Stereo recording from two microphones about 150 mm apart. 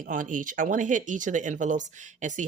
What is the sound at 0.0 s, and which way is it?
Speech, 60° right (ahead or behind).